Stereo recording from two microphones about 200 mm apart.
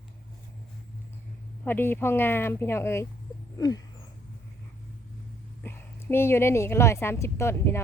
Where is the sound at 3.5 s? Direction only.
20° left (ahead or behind).